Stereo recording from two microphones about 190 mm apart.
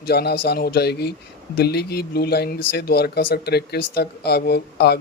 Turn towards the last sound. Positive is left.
turn(degrees=60)  # may be behind; listen again after turning